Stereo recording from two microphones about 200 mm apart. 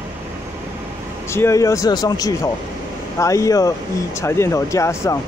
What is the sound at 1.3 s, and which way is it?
Speech, 15° left (ahead or behind).